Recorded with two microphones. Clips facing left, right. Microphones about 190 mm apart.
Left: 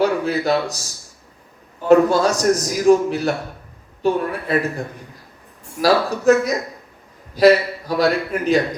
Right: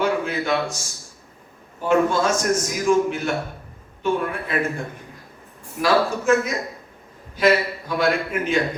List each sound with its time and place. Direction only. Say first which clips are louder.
0.0 s a man's voice: left 4 dB; 35° left (ahead or behind)
1.9 s a man's voice: left 5 dB; 35° left (ahead or behind)
5.8 s a man's voice: left 4 dB; 35° left (ahead or behind)